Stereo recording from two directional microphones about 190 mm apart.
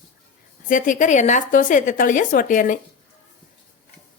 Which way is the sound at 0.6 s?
45° left (ahead or behind).